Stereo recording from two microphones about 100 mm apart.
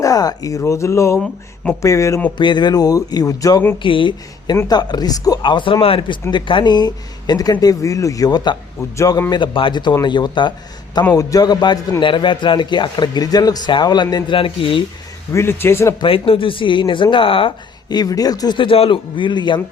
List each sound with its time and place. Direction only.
0.0 s a man's voice: 35° left (ahead or behind)
2.4 s speech: 50° left (ahead or behind)
3.8 s speech: 55° left (ahead or behind)
4.7 s a man's voice: 45° left (ahead or behind); by 6.1 s 60° left (ahead or behind)
6.3 s speech: 50° left (ahead or behind); by 9.2 s 35° left (ahead or behind)
9.3 s a man's voice: 55° left (ahead or behind)
11.1 s a man's voice: 35° left (ahead or behind)
14.3 s speech: 65° left (ahead or behind)
15.3 s a man's voice: 25° left (ahead or behind)
16.0 s speech: 65° left (ahead or behind)
17.8 s speech: 40° left (ahead or behind)
18.5 s speech: 60° left (ahead or behind)